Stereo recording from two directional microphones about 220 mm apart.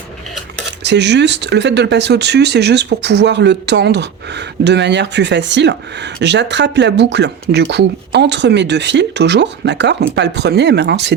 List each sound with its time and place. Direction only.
0.8 s speech: 50° right (ahead or behind)